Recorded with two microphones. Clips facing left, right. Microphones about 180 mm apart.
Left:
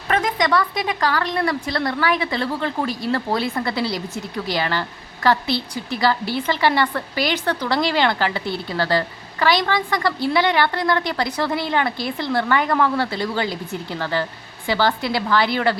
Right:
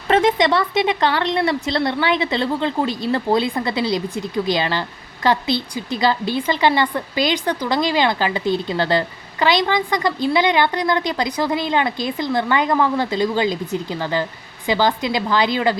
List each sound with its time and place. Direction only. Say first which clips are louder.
0.1 s a woman's voice: right 4 dB; 25° right (ahead or behind)